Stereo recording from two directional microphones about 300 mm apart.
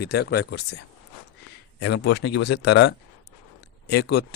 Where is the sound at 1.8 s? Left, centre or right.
Left.